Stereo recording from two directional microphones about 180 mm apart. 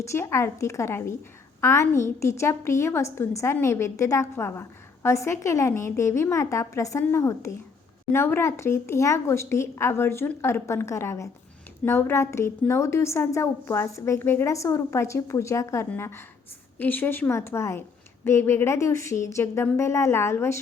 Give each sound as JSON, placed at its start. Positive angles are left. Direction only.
{"t": 0.0, "sound": "a woman's voice", "side_deg": 15}